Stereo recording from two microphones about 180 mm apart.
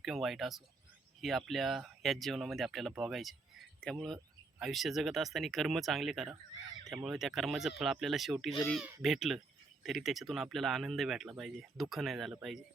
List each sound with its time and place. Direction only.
0.0 s speech: centre (ahead or behind)